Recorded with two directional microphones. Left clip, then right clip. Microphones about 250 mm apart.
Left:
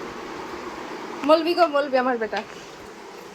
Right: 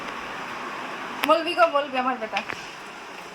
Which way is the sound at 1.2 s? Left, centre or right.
Centre.